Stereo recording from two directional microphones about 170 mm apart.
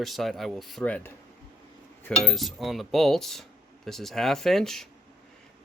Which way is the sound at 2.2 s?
Centre (ahead or behind).